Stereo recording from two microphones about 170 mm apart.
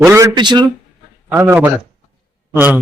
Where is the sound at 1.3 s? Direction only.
15° right (ahead or behind).